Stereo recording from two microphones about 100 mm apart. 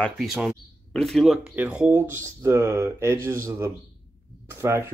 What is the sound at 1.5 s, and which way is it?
Speech, 15° right (ahead or behind).